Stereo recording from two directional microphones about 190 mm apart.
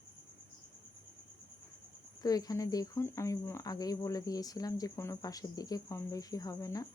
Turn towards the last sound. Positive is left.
turn(degrees=20)  # may be behind; listen again after turning